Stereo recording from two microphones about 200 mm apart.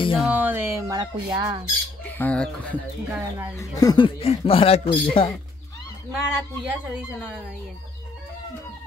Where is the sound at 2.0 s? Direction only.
10° left (ahead or behind).